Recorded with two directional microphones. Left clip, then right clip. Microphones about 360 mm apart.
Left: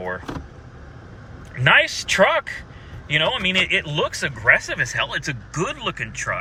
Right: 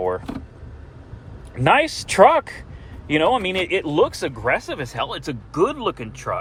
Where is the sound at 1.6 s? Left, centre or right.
Centre.